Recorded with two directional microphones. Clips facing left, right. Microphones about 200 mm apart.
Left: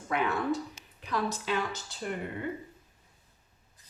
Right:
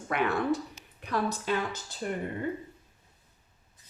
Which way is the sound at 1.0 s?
55° right (ahead or behind).